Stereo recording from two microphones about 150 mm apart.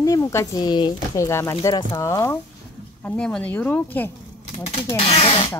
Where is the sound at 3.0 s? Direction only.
5° left (ahead or behind).